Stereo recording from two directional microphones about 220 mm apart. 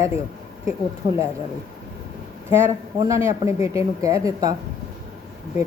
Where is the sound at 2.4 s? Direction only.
10° right (ahead or behind).